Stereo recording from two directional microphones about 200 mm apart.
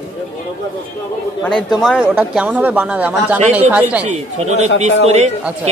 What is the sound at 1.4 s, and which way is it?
Speech, centre (ahead or behind).